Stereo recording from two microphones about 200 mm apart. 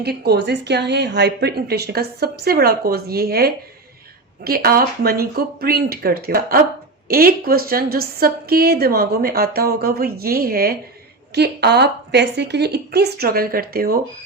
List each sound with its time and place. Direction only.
0.0 s a woman's voice: 55° right (ahead or behind)